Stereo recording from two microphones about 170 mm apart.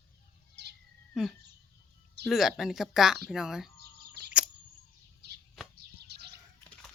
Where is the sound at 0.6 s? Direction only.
85° right.